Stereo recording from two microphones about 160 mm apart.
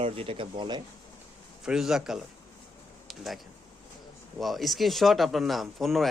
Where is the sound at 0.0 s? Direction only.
35° right (ahead or behind).